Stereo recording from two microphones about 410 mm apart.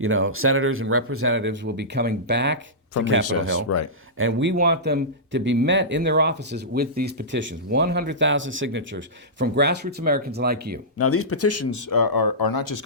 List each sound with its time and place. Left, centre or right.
0.0 s speech: right
3.4 s speech: left
4.2 s speech: right
10.9 s speech: left
11.9 s speech: left